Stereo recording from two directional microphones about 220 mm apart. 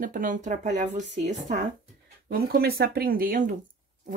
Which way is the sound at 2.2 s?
45° right (ahead or behind).